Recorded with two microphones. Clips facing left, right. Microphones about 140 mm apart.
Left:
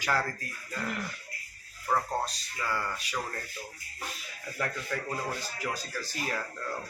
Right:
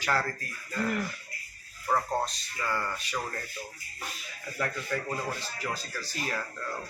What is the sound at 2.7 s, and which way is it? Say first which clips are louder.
Speech: right 1 dB; 5° left (ahead or behind).